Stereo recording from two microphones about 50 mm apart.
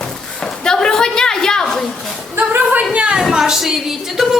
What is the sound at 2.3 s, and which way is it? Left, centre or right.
Speech, right.